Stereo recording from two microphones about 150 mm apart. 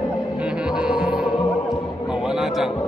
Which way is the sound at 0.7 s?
5° right (ahead or behind).